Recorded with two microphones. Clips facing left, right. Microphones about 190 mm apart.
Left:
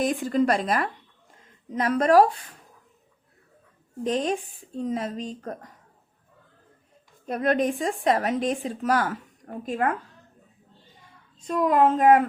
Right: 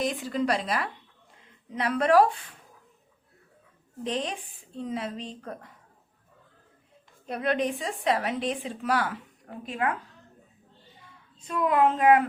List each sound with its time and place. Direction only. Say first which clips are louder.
0.0 s a woman's voice: left 5 dB; 50° left (ahead or behind)
4.0 s a woman's voice: left 6 dB; 45° left (ahead or behind)
7.3 s a woman's voice: left 4 dB; 45° left (ahead or behind)
11.3 s a woman's voice: left 3 dB; 40° left (ahead or behind)